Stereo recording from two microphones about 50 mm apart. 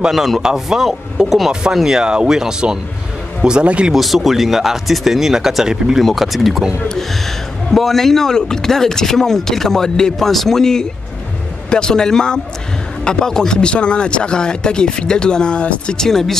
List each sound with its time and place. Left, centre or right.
0.1 s speech: centre
1.5 s speech: centre
3.9 s speech: centre
7.7 s speech: centre; by 16.0 s left
16.0 s speech: centre